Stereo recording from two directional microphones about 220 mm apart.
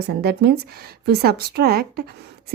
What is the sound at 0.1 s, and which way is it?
A woman's voice, 50° right (ahead or behind).